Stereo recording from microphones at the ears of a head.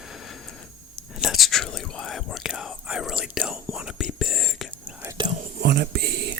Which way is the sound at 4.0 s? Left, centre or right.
Left.